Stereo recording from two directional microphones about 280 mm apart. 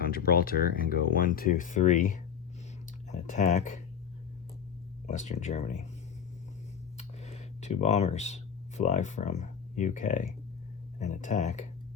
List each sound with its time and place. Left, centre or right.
0.0 s speech: left
5.0 s speech: left
6.9 s a sound: left
11.0 s speech: left